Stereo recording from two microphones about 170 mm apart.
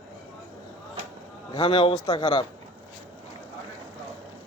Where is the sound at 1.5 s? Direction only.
30° left (ahead or behind).